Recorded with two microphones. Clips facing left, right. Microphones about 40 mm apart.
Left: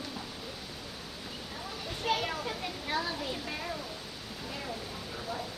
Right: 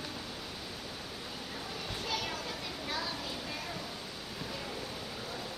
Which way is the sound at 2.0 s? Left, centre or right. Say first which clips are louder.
Left 7 dB; left.